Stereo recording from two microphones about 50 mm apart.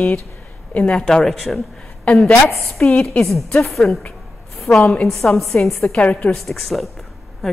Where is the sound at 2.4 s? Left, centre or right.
Left.